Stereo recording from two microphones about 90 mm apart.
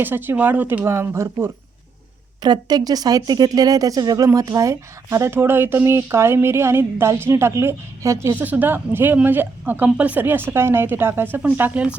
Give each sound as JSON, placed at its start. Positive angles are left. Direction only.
{"t": 0.0, "sound": "speech", "side_deg": -25}
{"t": 2.4, "sound": "speech", "side_deg": -50}